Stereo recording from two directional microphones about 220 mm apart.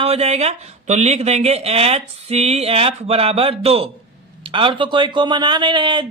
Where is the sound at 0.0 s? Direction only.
25° right (ahead or behind).